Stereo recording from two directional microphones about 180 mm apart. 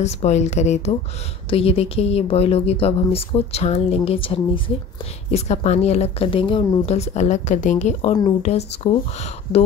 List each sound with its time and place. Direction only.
0.0 s speech: 40° left (ahead or behind)